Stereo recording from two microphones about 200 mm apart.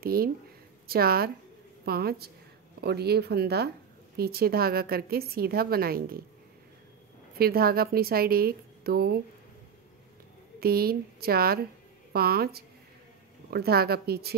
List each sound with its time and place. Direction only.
0.0 s a woman's voice: 50° right (ahead or behind)
7.3 s a woman's voice: 50° right (ahead or behind)
10.6 s a woman's voice: 50° right (ahead or behind)